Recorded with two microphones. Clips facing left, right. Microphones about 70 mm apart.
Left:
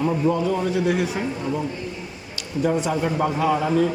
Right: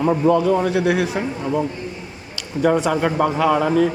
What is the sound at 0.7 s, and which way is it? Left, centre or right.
Speech, right.